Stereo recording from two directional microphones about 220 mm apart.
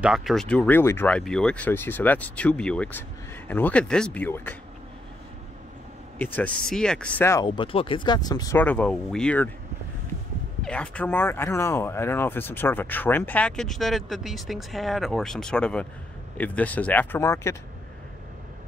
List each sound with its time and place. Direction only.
0.0 s speech: centre (ahead or behind)
6.1 s speech: 10° left (ahead or behind)
7.4 s speech: 25° left (ahead or behind); by 9.5 s 5° left (ahead or behind)
10.6 s speech: 5° left (ahead or behind)